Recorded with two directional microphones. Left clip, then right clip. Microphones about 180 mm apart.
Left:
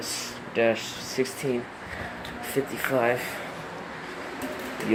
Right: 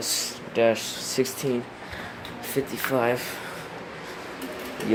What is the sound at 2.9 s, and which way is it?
Speech, 15° right (ahead or behind).